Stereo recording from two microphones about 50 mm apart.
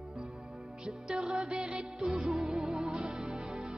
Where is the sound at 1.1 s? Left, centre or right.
Centre.